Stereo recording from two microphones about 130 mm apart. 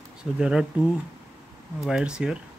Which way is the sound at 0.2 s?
5° right (ahead or behind).